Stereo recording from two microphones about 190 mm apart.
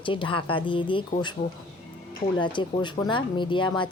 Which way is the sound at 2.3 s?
25° left (ahead or behind).